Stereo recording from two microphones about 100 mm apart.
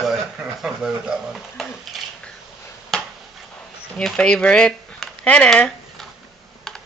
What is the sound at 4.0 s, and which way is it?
Speech, 5° left (ahead or behind).